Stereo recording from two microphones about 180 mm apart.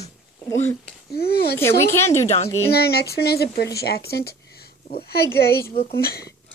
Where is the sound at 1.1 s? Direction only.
60° left (ahead or behind).